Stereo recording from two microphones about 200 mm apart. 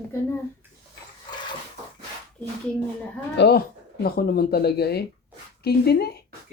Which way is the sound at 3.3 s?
55° left (ahead or behind).